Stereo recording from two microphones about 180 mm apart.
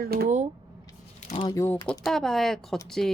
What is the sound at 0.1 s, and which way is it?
Speech, 55° right (ahead or behind).